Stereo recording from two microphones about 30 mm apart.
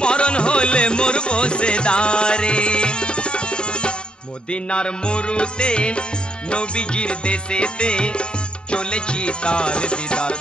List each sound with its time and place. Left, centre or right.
0.0 s music: left